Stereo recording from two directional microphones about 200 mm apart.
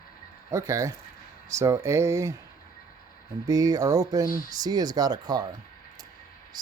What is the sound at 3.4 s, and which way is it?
Speech, 15° right (ahead or behind).